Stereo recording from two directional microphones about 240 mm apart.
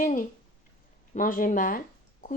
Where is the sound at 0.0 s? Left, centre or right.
Left.